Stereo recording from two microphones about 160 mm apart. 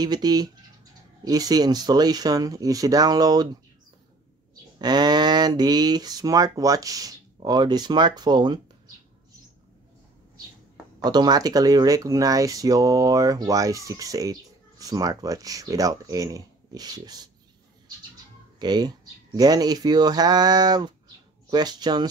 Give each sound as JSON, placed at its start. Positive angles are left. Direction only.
{"t": 0.0, "sound": "speech", "side_deg": -25}
{"t": 4.7, "sound": "speech", "side_deg": -25}
{"t": 11.1, "sound": "speech", "side_deg": -25}
{"t": 18.6, "sound": "speech", "side_deg": -25}